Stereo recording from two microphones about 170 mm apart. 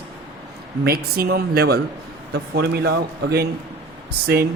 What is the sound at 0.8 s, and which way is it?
A man's voice, 65° right (ahead or behind).